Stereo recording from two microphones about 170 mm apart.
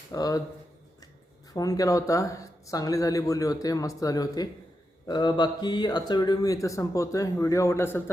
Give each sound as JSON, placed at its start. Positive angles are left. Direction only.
{"t": 0.1, "sound": "speech", "side_deg": 20}
{"t": 1.5, "sound": "speech", "side_deg": 20}